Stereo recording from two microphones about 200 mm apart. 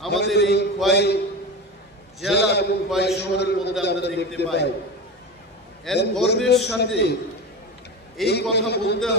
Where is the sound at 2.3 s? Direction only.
55° left (ahead or behind).